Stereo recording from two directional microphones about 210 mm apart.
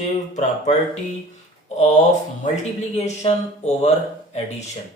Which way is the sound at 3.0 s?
30° left (ahead or behind).